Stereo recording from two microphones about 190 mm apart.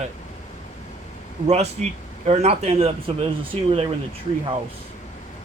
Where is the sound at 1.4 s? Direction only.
35° right (ahead or behind).